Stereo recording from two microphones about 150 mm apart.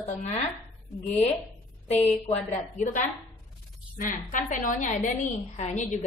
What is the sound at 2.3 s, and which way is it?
A woman's voice, 55° left (ahead or behind).